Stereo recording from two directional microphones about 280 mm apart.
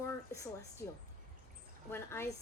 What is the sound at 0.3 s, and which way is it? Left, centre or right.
Speech, centre.